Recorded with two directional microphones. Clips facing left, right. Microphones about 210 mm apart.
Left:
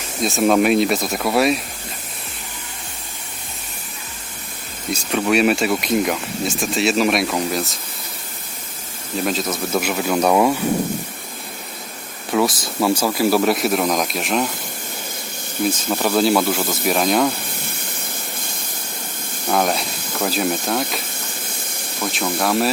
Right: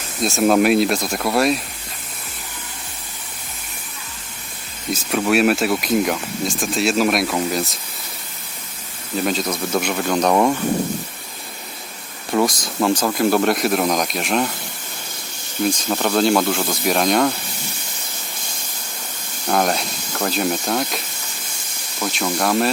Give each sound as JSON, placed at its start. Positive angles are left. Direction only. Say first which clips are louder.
{"t": 0.2, "sound": "speech", "louder": "even", "side_deg": 0}
{"t": 4.9, "sound": "speech", "louder": "even", "side_deg": 0}
{"t": 9.1, "sound": "speech", "louder": "right 1 dB", "side_deg": 0}
{"t": 12.3, "sound": "speech", "louder": "even", "side_deg": 5}
{"t": 15.6, "sound": "speech", "louder": "even", "side_deg": 5}
{"t": 17.6, "sound": "spray", "louder": "left 2 dB", "side_deg": 55}
{"t": 19.5, "sound": "hiss", "louder": "even", "side_deg": 0}
{"t": 22.0, "sound": "speech", "louder": "even", "side_deg": 0}